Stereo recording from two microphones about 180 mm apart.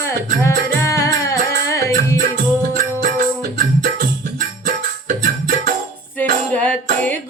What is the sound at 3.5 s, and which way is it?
Music, 50° right (ahead or behind).